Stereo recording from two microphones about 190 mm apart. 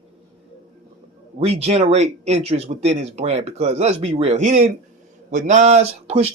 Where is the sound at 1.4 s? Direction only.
35° right (ahead or behind).